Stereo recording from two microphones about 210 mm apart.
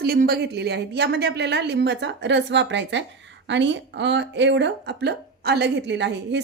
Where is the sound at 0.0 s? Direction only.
50° right (ahead or behind).